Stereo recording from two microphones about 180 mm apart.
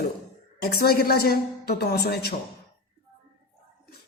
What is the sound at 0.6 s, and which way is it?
A woman's voice, 60° left (ahead or behind).